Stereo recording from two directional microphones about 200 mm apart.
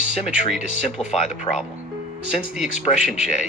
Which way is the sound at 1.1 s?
35° left (ahead or behind).